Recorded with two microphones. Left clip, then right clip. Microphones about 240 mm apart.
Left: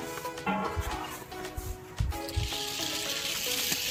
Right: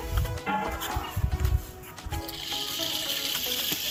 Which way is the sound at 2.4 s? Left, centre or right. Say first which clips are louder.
Right 4 dB; centre.